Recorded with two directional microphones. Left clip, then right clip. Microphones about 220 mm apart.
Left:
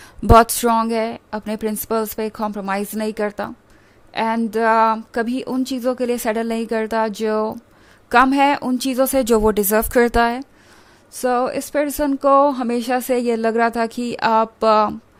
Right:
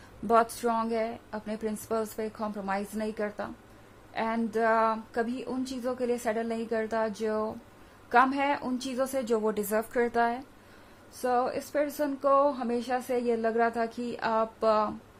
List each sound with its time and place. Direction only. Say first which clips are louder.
0.3 s a woman's voice: left 12 dB; 45° left (ahead or behind)